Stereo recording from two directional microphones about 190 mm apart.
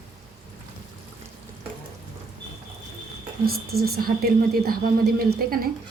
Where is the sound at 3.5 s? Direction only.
55° right (ahead or behind).